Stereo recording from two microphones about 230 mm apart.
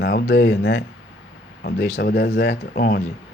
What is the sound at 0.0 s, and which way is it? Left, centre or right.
Speech, left.